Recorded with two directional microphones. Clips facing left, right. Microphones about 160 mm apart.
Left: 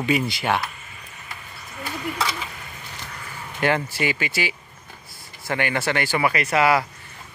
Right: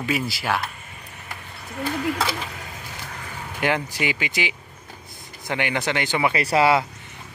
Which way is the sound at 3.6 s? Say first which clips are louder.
Left 1 dB; 15° right (ahead or behind).